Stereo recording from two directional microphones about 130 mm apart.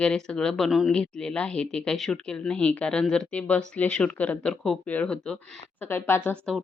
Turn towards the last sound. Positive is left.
turn(degrees=15)  # may be behind; listen again after turning